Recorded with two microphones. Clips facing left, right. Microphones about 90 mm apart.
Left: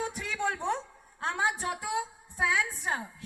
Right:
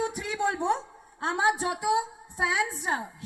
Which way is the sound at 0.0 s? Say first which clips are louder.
Right 4 dB; 10° right (ahead or behind).